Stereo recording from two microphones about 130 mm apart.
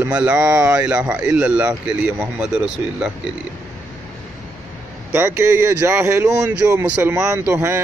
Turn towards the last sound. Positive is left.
turn(degrees=-15)  # may be behind; listen again after turning